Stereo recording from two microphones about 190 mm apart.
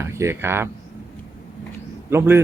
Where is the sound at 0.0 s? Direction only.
15° right (ahead or behind).